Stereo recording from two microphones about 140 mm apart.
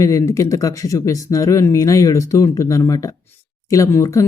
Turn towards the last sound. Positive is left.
turn(degrees=20)  # may be behind; listen again after turning